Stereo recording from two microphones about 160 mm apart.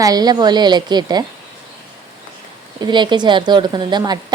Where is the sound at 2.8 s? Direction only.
30° right (ahead or behind).